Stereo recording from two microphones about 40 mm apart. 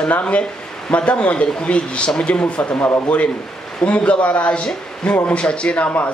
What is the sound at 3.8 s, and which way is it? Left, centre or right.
A man's voice, left.